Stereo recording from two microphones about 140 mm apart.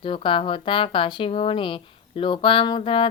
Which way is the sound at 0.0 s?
40° left (ahead or behind).